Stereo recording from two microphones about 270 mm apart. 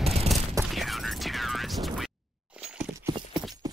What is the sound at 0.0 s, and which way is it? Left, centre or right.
Fusillade, right.